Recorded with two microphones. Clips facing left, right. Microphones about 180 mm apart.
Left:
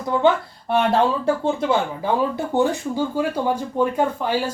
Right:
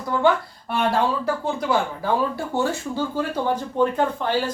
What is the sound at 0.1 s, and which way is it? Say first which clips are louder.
Speech: left 1 dB; 20° left (ahead or behind).